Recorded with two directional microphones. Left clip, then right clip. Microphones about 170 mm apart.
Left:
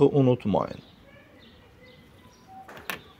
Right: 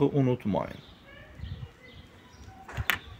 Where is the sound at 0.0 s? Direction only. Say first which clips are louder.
Left 6 dB; 20° left (ahead or behind).